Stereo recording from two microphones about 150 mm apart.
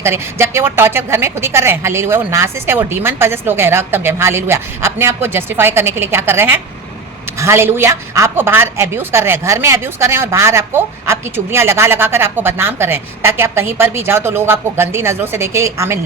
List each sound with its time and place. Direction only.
0.0 s a woman's voice: 15° right (ahead or behind)